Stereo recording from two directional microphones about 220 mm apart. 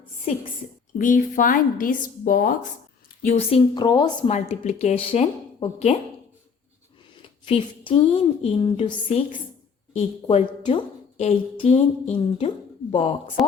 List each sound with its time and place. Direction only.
0.9 s speech: 35° left (ahead or behind)
3.2 s a woman's voice: 25° left (ahead or behind)
4.3 s a woman's voice: 30° left (ahead or behind)
7.4 s a woman's voice: 25° left (ahead or behind)